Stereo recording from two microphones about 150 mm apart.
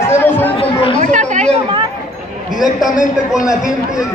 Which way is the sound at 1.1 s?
50° right (ahead or behind).